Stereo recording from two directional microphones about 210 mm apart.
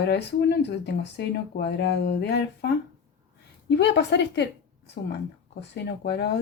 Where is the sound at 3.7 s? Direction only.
55° left (ahead or behind).